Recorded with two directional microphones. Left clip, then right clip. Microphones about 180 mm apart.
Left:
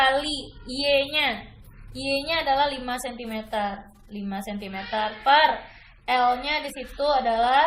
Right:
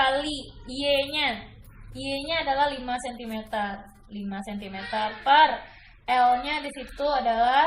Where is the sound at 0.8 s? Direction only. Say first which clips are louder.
Left 2 dB; 30° left (ahead or behind).